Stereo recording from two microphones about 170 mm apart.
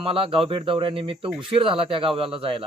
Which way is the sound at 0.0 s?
30° right (ahead or behind).